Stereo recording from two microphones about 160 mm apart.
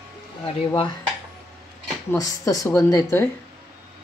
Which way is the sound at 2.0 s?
20° left (ahead or behind).